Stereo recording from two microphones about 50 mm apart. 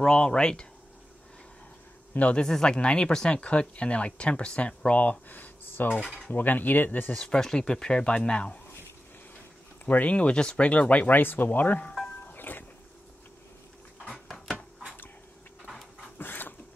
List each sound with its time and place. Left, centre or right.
0.0 s speech: centre
2.1 s speech: left
2.4 s speech: centre; by 5.9 s left
5.9 s speech: left
6.3 s speech: left
7.2 s speech: centre
9.8 s speech: left
11.1 s speech: left
12.3 s music: left
16.2 s a sound: left